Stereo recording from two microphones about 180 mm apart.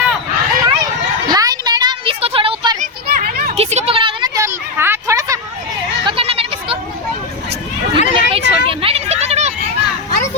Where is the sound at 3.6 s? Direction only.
35° right (ahead or behind); by 5.4 s 15° right (ahead or behind).